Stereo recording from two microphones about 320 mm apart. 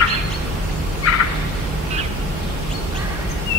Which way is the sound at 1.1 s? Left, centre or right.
Left.